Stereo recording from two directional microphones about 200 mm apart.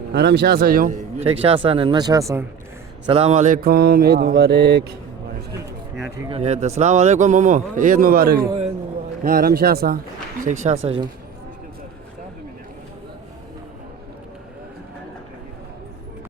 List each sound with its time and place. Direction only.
0.1 s a man's voice: 55° right (ahead or behind); by 2.4 s 15° right (ahead or behind)
3.1 s mantra: 30° right (ahead or behind); by 4.9 s 55° right (ahead or behind)
6.1 s a man's voice: 25° right (ahead or behind); by 8.4 s 45° right (ahead or behind)
9.2 s mantra: 45° right (ahead or behind)
10.4 s a man's voice: 35° right (ahead or behind)